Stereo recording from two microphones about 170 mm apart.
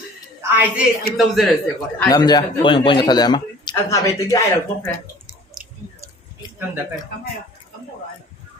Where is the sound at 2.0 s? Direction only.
25° left (ahead or behind).